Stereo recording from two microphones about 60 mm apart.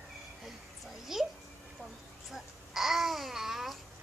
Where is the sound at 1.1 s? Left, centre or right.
Centre.